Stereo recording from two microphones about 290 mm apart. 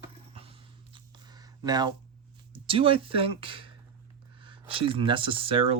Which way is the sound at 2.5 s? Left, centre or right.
Centre.